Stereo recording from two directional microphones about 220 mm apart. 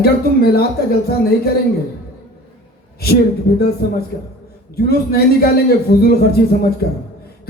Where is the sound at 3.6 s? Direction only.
45° left (ahead or behind).